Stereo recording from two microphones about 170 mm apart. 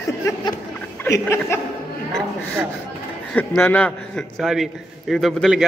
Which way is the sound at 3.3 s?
10° left (ahead or behind).